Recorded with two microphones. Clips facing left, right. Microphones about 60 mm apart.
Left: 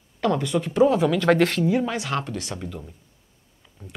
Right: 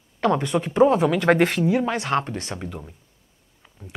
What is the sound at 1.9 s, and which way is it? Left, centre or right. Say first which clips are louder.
Speech: right 4 dB; right.